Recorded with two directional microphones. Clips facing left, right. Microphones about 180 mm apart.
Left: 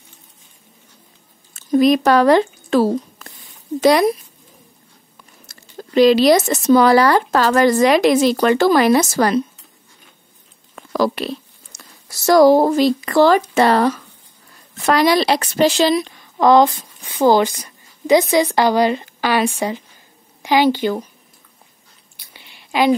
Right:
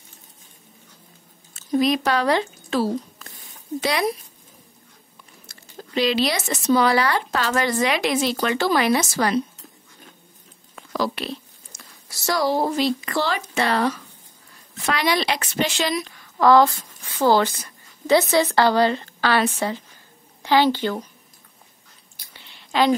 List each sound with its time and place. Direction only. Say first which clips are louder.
1.5 s speech: left 7 dB; 50° left (ahead or behind)
5.5 s speech: left 7 dB; 45° left (ahead or behind)
11.0 s a woman's voice: left 7 dB; 45° left (ahead or behind); by 21.0 s 15° left (ahead or behind)
22.3 s a sound: left 2 dB; 10° left (ahead or behind)